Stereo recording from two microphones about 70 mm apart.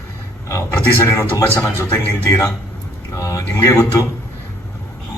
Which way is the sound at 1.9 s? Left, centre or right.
Left.